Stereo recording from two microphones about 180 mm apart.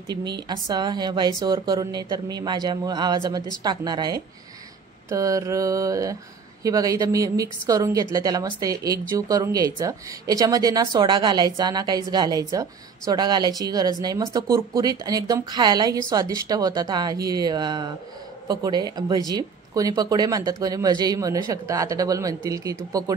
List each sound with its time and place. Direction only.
0.5 s speech: 25° right (ahead or behind)